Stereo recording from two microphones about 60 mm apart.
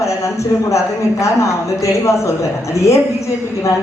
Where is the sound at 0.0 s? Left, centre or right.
Left.